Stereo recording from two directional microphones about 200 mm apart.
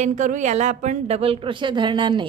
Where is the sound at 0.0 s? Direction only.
40° right (ahead or behind).